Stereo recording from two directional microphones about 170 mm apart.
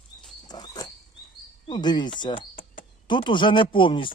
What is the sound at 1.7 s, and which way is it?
Speech, 25° left (ahead or behind).